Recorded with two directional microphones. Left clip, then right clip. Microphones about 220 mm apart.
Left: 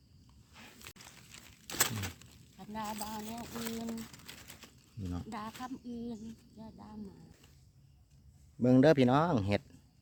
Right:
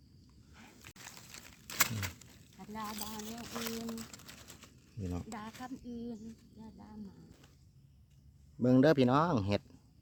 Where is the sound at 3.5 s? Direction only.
10° right (ahead or behind).